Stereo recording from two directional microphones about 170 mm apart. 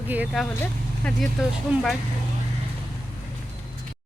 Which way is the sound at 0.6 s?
5° left (ahead or behind).